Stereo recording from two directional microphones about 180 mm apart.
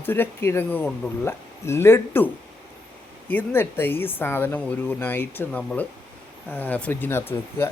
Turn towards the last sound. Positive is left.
turn(degrees=15)  # may be behind; listen again after turning